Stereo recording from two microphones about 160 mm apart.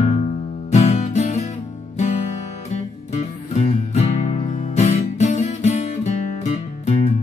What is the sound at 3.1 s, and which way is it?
Music, 45° left (ahead or behind).